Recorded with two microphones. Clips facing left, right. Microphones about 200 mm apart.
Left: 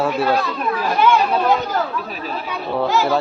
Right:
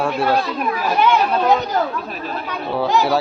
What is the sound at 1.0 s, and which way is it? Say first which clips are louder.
Chatter: left 1 dB; 20° right (ahead or behind).